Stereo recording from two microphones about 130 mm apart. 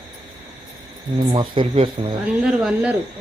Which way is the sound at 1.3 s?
40° right (ahead or behind).